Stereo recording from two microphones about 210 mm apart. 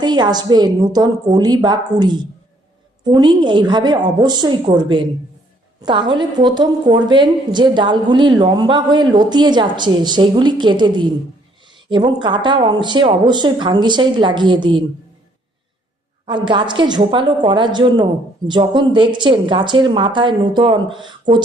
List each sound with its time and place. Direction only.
0.0 s a woman's voice: 20° right (ahead or behind)
16.2 s a woman's voice: 20° right (ahead or behind)